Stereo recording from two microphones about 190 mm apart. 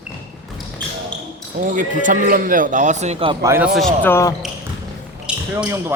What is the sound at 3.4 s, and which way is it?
Speech, 15° right (ahead or behind).